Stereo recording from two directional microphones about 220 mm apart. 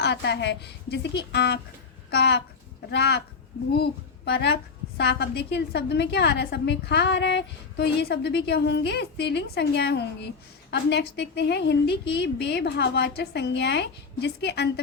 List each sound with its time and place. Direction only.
0.0 s a woman's voice: 50° left (ahead or behind)
4.3 s a woman's voice: 50° left (ahead or behind)